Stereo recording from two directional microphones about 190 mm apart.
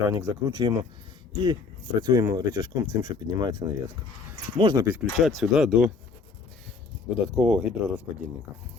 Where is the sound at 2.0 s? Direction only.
20° right (ahead or behind).